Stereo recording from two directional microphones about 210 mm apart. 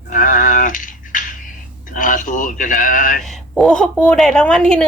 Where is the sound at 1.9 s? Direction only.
40° left (ahead or behind).